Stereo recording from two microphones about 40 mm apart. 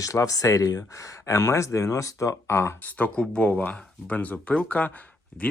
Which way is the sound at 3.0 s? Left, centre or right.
Left.